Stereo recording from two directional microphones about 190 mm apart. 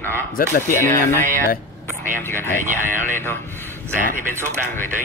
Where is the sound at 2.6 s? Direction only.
45° right (ahead or behind).